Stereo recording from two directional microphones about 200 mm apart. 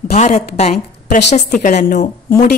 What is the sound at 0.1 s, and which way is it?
A woman's voice, 35° left (ahead or behind).